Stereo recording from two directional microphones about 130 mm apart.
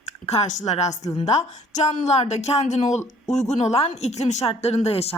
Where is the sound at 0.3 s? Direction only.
60° left (ahead or behind).